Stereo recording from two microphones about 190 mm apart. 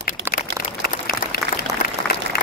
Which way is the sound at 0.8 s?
50° left (ahead or behind).